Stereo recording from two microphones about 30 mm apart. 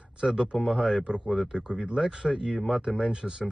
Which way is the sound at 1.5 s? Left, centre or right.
Right.